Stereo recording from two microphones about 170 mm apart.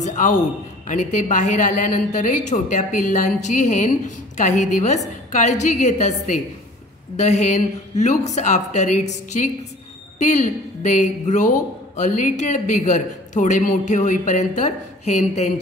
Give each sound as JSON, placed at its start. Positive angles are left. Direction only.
{"t": 0.0, "sound": "a man's voice", "side_deg": 45}